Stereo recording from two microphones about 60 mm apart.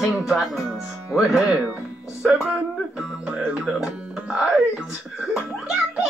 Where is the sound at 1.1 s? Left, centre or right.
Centre.